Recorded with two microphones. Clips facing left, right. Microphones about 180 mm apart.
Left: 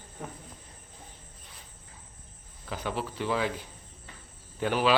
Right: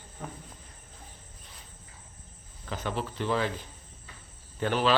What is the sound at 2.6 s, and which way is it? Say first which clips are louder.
Speech: even; 5° left (ahead or behind).